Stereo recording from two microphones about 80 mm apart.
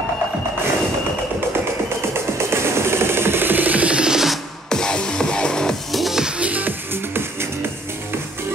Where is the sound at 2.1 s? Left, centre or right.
Right; by 4.4 s centre.